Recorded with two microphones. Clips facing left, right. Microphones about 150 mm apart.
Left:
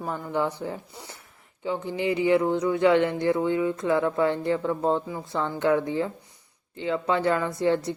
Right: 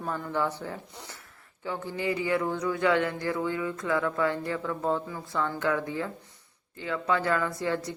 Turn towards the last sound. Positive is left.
turn(degrees=25)  # may be behind; listen again after turning